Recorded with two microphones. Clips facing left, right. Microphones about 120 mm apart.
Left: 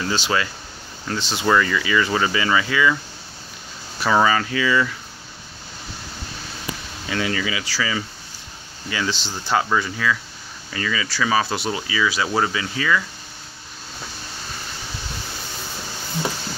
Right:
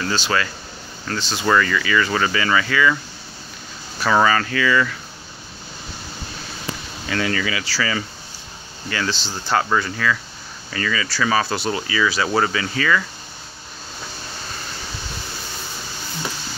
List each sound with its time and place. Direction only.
0.0 s speech: 15° left (ahead or behind)
4.0 s speech: 10° left (ahead or behind)
7.1 s speech: 15° left (ahead or behind)